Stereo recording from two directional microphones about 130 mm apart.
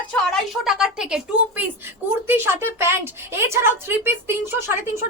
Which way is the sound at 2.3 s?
15° right (ahead or behind).